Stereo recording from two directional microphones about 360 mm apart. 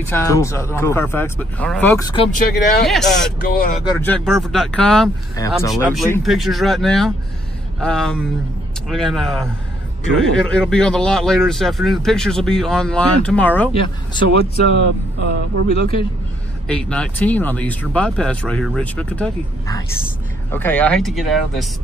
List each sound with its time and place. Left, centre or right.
0.0 s speech: centre
2.3 s speech: left
2.9 s speech: centre
3.5 s speech: left
4.0 s speech: centre
5.8 s speech: centre
13.7 s speech: centre
16.6 s speech: centre